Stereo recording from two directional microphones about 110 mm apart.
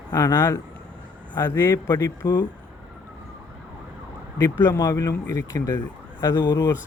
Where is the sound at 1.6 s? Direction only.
35° left (ahead or behind).